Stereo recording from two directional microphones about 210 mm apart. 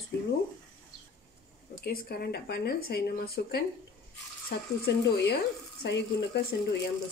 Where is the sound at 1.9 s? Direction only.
50° left (ahead or behind).